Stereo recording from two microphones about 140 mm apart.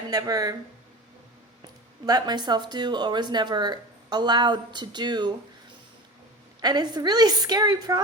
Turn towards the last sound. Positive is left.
turn(degrees=-30)  # may be behind; listen again after turning